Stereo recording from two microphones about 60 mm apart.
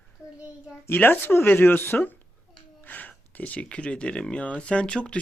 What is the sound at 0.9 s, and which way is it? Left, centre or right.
Speech, left.